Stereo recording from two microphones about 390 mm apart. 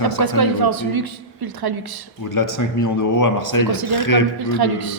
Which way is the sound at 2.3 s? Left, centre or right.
Left.